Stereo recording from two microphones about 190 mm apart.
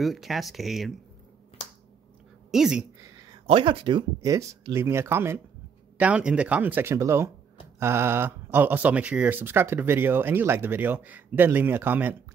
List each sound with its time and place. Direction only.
0.0 s speech: centre (ahead or behind)
2.5 s speech: 5° right (ahead or behind)
3.3 s speech: 25° right (ahead or behind); by 12.2 s 10° right (ahead or behind)